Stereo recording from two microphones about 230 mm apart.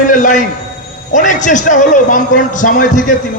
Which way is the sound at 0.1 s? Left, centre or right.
Left.